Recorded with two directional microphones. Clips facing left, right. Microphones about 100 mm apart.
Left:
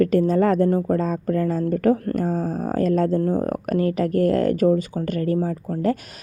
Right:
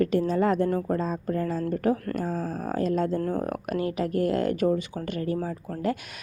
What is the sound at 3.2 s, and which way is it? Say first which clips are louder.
Speech: left 6 dB; 25° left (ahead or behind).